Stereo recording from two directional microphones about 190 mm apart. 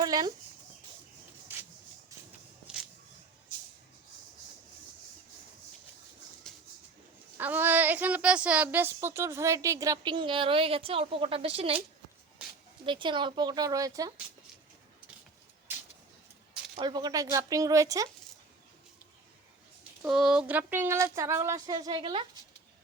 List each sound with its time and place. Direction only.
0.0 s speech: 20° right (ahead or behind)
7.3 s a woman's voice: 10° right (ahead or behind); by 11.8 s 30° right (ahead or behind)
12.8 s speech: 25° right (ahead or behind)
16.7 s speech: 25° right (ahead or behind)
20.1 s a woman's voice: 5° right (ahead or behind); by 22.2 s 25° right (ahead or behind)